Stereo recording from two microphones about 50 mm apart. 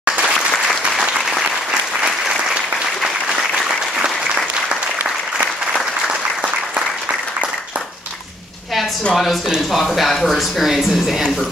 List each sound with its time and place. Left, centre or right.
0.0 s applause: centre
4.0 s applause: centre
9.1 s speech: centre